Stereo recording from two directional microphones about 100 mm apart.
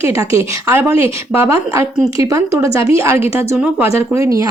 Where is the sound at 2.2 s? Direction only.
35° right (ahead or behind).